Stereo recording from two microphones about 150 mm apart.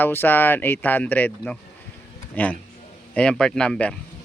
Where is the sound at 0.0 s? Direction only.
15° left (ahead or behind).